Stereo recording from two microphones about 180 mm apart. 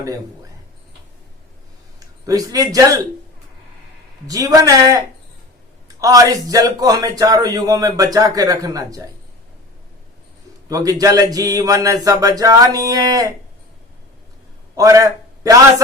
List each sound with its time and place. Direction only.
2.2 s a man's voice: 20° right (ahead or behind)
4.3 s a man's voice: 20° right (ahead or behind)
10.7 s a man's voice: 20° right (ahead or behind)
14.8 s a man's voice: 20° right (ahead or behind)